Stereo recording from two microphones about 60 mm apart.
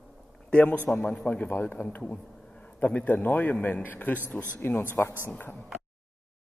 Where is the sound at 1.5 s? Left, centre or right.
Left.